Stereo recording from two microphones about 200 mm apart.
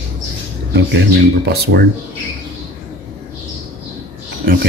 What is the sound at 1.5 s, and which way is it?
Speech, 55° right (ahead or behind).